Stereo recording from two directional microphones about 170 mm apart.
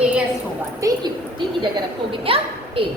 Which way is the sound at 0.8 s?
20° right (ahead or behind).